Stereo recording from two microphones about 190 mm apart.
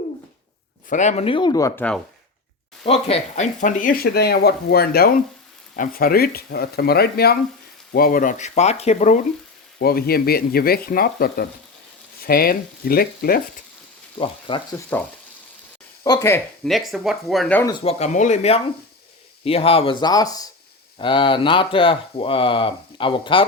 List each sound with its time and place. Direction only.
0.9 s speech: 40° left (ahead or behind); by 1.8 s 15° left (ahead or behind)
2.8 s speech: 30° left (ahead or behind)
9.7 s speech: 55° left (ahead or behind)
14.2 s speech: 25° left (ahead or behind)
14.9 s speech: 10° left (ahead or behind)
16.6 s speech: centre (ahead or behind)
17.7 s speech: 30° left (ahead or behind)